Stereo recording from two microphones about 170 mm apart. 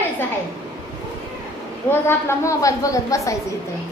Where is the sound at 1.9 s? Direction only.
15° left (ahead or behind).